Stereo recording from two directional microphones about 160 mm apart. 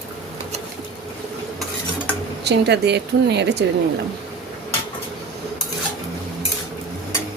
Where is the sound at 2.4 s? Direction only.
90° right.